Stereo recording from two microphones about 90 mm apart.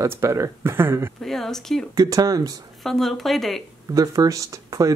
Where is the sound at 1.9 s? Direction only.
45° right (ahead or behind).